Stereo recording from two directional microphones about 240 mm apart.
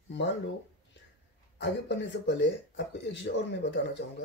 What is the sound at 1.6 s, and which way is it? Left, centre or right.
Speech, left.